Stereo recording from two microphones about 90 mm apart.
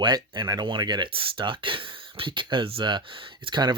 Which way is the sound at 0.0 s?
55° right (ahead or behind).